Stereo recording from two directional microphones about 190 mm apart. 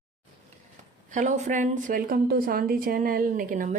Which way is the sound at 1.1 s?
40° right (ahead or behind).